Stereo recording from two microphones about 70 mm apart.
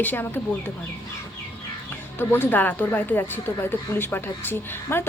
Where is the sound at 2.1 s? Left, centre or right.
Left.